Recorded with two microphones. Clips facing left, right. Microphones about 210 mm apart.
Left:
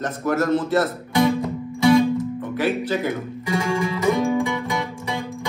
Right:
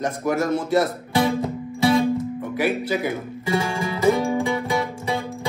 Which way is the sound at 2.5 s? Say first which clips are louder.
Even; 10° right (ahead or behind).